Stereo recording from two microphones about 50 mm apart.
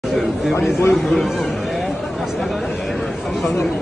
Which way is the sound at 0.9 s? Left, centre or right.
Centre.